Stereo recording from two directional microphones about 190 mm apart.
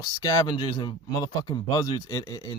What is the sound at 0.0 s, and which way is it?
Speech, 20° left (ahead or behind).